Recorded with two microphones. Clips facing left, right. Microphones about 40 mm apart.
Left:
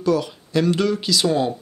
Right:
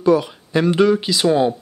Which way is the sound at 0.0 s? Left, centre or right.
Right.